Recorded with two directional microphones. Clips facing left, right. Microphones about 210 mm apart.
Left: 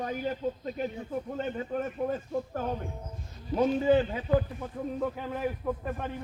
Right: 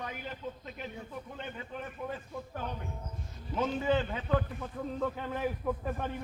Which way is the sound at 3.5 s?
35° left (ahead or behind).